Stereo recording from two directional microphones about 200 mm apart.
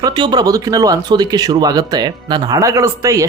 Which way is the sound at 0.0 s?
20° right (ahead or behind).